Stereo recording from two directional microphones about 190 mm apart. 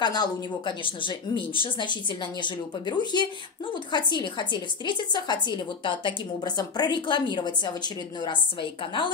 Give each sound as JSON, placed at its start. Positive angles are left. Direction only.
{"t": 0.0, "sound": "a woman's voice", "side_deg": 20}